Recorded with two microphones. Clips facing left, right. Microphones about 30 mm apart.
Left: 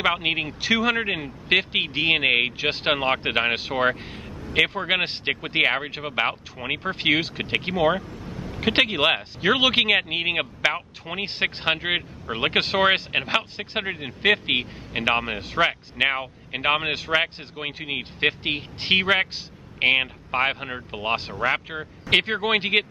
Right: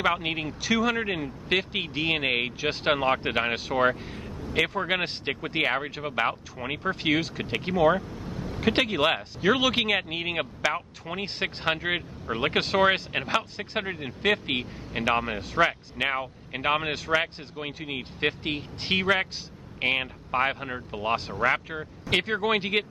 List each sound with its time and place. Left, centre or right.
0.0 s speech: left
8.2 s vehicle: centre
8.5 s speech: left